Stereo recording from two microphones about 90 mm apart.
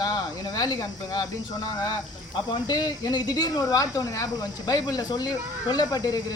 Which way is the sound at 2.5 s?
50° left (ahead or behind).